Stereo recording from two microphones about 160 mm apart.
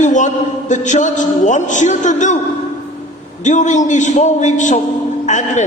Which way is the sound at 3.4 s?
50° left (ahead or behind).